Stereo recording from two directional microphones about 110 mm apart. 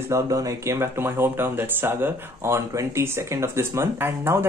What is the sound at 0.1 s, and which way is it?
Speech, 30° right (ahead or behind).